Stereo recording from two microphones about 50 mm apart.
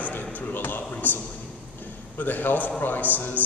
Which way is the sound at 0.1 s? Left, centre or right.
Left.